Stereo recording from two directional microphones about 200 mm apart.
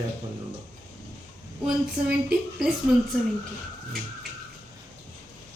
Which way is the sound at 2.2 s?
5° right (ahead or behind).